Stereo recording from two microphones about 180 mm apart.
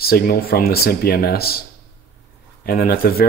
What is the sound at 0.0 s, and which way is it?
Speech, 55° left (ahead or behind).